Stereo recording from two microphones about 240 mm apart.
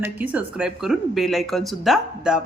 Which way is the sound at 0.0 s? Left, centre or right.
Centre.